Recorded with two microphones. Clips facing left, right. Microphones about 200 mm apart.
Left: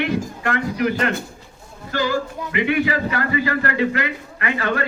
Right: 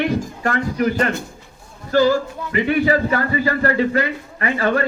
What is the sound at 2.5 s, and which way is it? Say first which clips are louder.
A man's voice: right 3 dB; 40° right (ahead or behind).